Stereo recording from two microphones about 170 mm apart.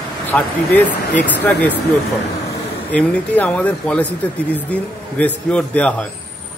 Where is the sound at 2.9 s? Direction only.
10° left (ahead or behind).